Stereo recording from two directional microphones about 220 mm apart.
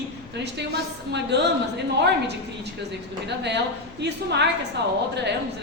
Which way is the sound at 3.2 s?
50° right (ahead or behind).